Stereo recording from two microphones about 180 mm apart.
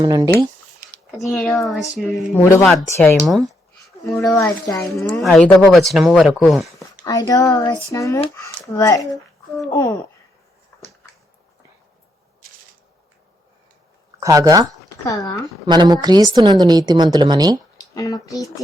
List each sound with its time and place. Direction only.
0.0 s a woman's voice: 25° right (ahead or behind)
1.3 s speech: centre (ahead or behind)
2.4 s a woman's voice: 15° left (ahead or behind)
3.2 s a sound: centre (ahead or behind)
4.4 s a woman's voice: 15° left (ahead or behind)
5.2 s speech: 5° left (ahead or behind)
7.0 s a woman's voice: 20° left (ahead or behind)
14.2 s a woman's voice: 20° right (ahead or behind)
15.0 s speech: 20° left (ahead or behind)
15.6 s a woman's voice: 25° right (ahead or behind)
17.9 s speech: 20° left (ahead or behind)